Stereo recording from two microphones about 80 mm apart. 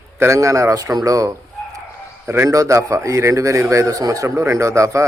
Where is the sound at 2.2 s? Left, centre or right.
Right.